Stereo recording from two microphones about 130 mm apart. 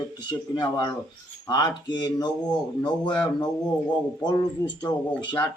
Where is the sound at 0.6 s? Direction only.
35° left (ahead or behind).